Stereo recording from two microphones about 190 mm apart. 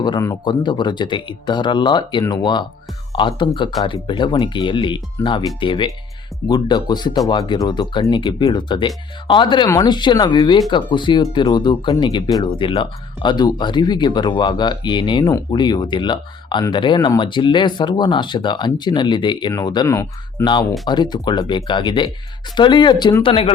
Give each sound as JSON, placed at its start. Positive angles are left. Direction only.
{"t": 0.0, "sound": "speech", "side_deg": 20}